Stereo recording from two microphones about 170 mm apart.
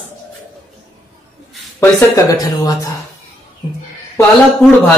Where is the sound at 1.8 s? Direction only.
20° left (ahead or behind).